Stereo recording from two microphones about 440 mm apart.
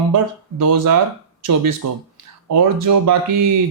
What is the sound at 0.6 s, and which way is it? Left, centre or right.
Speech, right.